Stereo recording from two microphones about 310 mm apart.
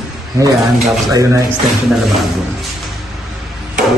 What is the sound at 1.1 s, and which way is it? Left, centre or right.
Speech, centre.